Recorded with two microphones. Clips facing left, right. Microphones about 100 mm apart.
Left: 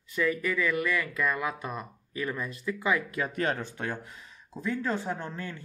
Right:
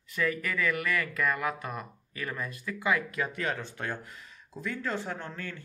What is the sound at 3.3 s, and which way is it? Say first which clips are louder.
Speech: left 4 dB; 45° left (ahead or behind).